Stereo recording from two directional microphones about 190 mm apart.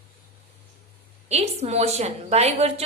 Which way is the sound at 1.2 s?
35° right (ahead or behind).